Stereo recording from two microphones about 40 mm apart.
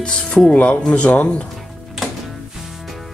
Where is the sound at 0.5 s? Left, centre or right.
Left.